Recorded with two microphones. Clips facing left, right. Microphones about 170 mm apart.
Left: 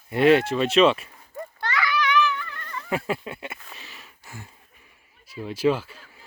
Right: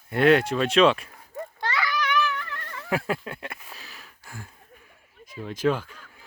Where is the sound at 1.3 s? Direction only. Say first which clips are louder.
Left 1 dB; 30° right (ahead or behind).